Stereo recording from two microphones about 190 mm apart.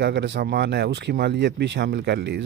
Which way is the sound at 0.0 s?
65° right (ahead or behind).